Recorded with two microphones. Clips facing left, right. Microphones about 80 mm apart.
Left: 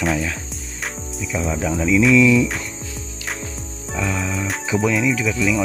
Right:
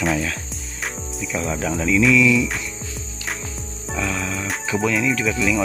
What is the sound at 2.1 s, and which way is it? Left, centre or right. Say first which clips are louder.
Cricket: left 3 dB; left.